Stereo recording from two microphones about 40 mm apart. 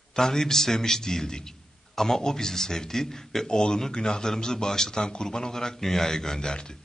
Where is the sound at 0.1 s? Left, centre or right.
Centre.